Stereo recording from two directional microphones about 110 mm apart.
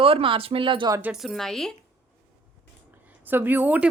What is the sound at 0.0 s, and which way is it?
Speech, 55° right (ahead or behind).